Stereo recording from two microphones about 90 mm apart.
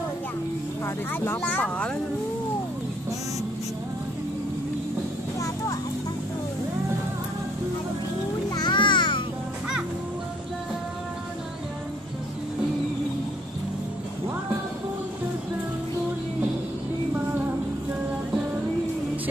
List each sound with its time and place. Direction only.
0.8 s speech: 25° left (ahead or behind)
8.5 s babbling: 55° left (ahead or behind)